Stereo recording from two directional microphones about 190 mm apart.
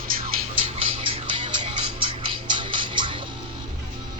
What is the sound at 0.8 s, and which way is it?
Music, 30° right (ahead or behind).